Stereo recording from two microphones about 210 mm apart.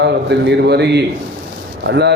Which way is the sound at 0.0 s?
55° right (ahead or behind).